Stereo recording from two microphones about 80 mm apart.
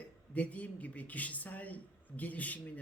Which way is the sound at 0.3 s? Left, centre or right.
Centre.